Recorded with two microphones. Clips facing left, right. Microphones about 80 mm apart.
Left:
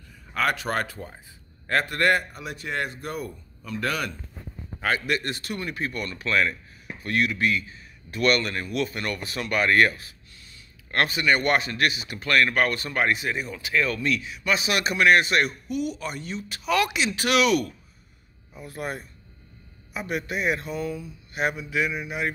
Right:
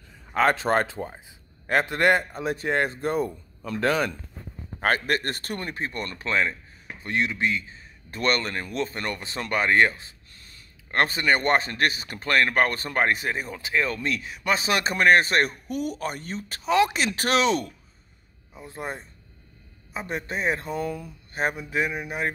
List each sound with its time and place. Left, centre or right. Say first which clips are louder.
0.3 s a man's voice: right 4 dB; right
2.4 s a man's voice: right 6 dB; right
4.7 s a man's voice: right 2 dB; right
21.4 s speech: even; right